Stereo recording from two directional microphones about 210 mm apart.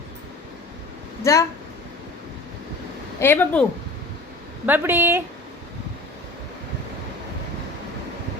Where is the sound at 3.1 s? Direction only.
10° left (ahead or behind).